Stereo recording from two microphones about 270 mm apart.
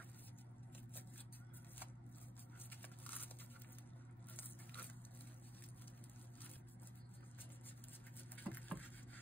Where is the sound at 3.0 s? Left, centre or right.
Centre.